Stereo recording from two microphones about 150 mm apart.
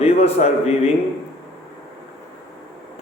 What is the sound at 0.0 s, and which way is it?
Speech, 45° left (ahead or behind).